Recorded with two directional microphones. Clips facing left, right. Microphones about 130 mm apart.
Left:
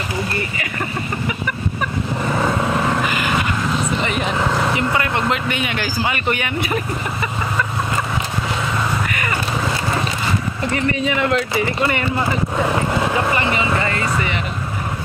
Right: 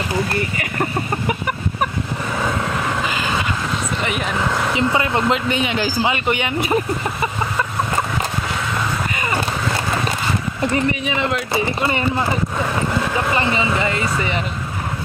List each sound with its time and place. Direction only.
4.7 s vehicle: 20° right (ahead or behind)
5.5 s speech: 25° right (ahead or behind)
10.9 s speech: 15° right (ahead or behind)
13.3 s speech: 25° right (ahead or behind)